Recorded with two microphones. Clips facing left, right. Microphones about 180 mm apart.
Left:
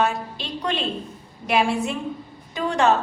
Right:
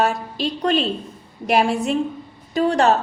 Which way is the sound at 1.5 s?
40° right (ahead or behind).